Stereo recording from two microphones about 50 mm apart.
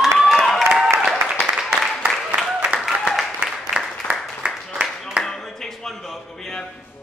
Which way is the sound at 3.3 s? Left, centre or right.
Centre.